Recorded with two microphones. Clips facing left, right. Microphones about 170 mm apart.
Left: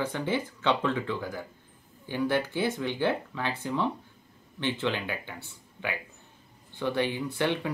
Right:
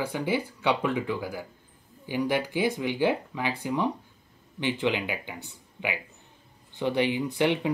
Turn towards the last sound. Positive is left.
turn(degrees=-15)  # may be behind; listen again after turning